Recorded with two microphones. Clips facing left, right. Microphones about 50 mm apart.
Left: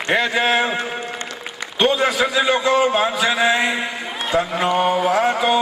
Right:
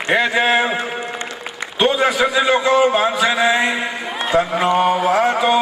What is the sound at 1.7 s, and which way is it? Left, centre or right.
A man's voice, centre.